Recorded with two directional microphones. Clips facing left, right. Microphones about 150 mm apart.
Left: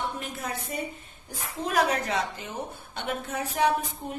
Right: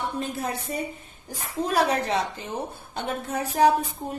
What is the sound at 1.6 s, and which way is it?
Speech, 35° right (ahead or behind).